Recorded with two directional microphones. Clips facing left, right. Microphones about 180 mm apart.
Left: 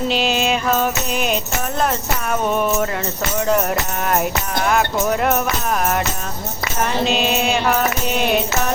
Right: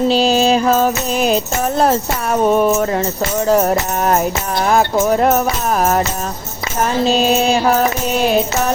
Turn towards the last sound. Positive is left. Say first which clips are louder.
# right 4 dB
turn(degrees=-35)  # may be behind; listen again after turning